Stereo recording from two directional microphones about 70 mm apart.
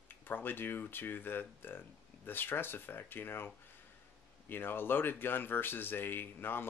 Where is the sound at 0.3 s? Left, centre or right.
Left.